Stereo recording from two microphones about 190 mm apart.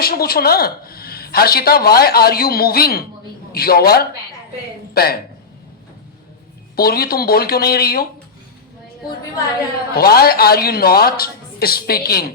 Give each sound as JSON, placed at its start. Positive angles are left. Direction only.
{"t": 0.0, "sound": "speech", "side_deg": 55}
{"t": 6.7, "sound": "speech", "side_deg": 55}
{"t": 9.9, "sound": "speech", "side_deg": 55}